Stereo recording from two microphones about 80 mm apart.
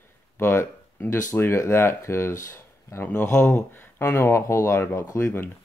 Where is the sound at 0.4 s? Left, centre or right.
Left.